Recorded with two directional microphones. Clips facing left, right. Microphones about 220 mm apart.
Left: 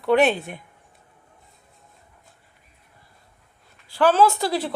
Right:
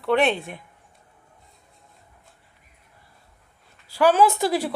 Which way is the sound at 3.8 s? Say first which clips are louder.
Even; 10° right (ahead or behind).